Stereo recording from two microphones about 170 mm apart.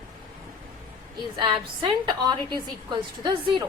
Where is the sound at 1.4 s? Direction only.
25° right (ahead or behind).